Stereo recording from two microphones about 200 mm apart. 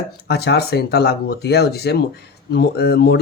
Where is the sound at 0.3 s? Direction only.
55° left (ahead or behind).